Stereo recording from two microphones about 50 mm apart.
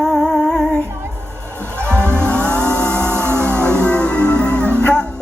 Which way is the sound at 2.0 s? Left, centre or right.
Right.